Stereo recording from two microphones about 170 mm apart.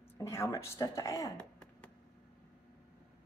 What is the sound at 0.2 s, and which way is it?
Speech, 15° left (ahead or behind).